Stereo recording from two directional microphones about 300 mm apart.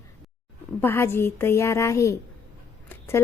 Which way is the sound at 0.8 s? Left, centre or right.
Centre.